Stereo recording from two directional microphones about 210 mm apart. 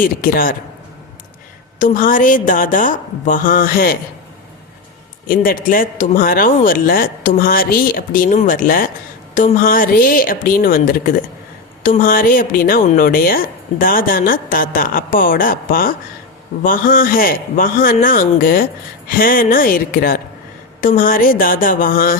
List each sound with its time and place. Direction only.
0.0 s a woman's voice: 40° left (ahead or behind)
1.8 s a woman's voice: 40° left (ahead or behind)
5.3 s a woman's voice: 40° left (ahead or behind)